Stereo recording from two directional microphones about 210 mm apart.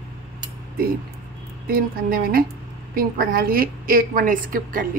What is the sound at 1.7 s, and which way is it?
A woman's voice, 45° right (ahead or behind).